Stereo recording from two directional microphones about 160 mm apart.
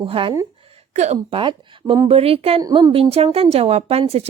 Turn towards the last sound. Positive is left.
turn(degrees=-40)  # may be behind; listen again after turning